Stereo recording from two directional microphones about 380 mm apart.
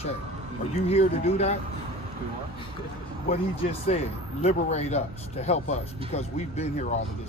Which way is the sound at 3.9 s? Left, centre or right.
Centre.